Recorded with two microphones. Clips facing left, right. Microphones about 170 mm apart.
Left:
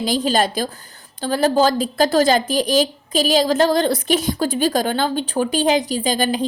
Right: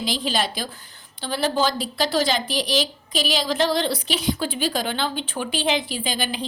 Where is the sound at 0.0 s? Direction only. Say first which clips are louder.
Left 6 dB; 45° left (ahead or behind).